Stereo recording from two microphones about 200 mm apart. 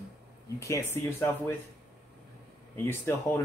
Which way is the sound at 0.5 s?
15° left (ahead or behind).